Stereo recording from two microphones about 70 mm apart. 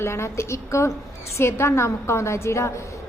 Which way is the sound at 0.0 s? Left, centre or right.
Left.